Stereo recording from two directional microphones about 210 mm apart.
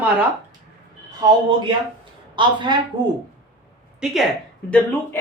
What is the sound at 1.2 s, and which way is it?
A woman's voice, 20° right (ahead or behind).